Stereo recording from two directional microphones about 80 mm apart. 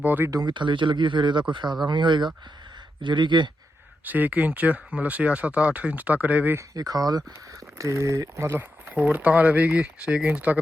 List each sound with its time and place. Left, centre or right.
0.0 s speech: right
0.3 s speech: right
0.5 s speech: right
4.0 s speech: right
6.7 s speech: right
7.8 s speech: right
9.0 s speech: centre